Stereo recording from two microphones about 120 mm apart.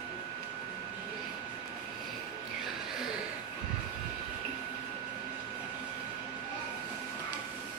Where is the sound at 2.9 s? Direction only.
5° right (ahead or behind).